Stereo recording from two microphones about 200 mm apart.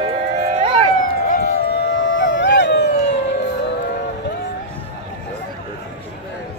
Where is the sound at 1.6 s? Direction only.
60° left (ahead or behind).